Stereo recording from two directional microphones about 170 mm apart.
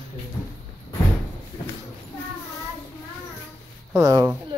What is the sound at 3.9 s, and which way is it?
Speech, 20° right (ahead or behind).